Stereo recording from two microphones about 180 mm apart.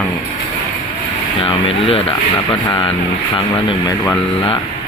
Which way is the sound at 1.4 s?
30° left (ahead or behind).